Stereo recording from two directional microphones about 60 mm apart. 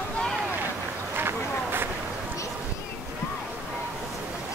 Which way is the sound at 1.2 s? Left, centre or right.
Right.